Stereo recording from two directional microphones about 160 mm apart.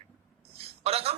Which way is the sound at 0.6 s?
40° right (ahead or behind).